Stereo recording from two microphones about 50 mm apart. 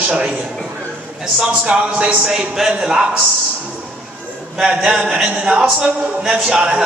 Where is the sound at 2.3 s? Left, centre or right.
Centre.